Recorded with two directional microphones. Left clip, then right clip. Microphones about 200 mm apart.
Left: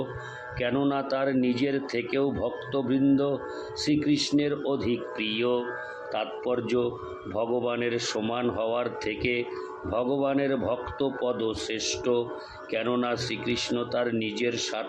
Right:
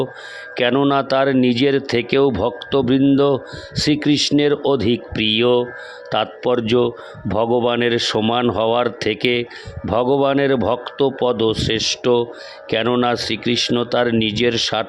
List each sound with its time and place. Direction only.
0.5 s a man's voice: 55° right (ahead or behind)